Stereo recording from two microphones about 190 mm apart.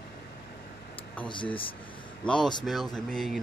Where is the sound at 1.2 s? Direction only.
25° left (ahead or behind).